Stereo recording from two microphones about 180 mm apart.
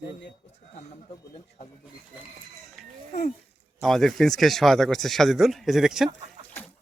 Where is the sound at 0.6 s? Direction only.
35° left (ahead or behind).